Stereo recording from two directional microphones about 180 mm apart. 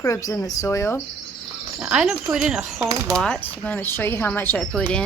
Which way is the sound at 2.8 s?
20° right (ahead or behind).